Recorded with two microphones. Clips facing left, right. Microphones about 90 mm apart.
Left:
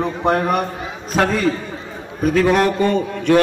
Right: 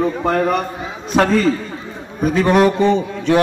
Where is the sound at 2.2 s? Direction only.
Centre (ahead or behind).